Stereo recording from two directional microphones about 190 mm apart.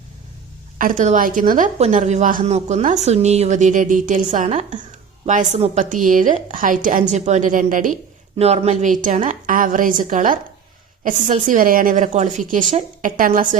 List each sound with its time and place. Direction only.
0.8 s a woman's voice: 45° right (ahead or behind)
8.4 s a woman's voice: 35° right (ahead or behind)